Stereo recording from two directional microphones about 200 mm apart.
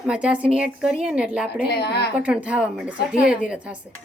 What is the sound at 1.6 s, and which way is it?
Speech, 55° left (ahead or behind).